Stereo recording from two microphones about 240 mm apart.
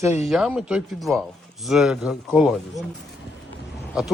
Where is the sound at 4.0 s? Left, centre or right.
Centre.